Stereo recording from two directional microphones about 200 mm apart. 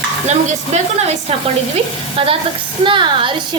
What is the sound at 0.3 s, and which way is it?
Speech, 35° right (ahead or behind).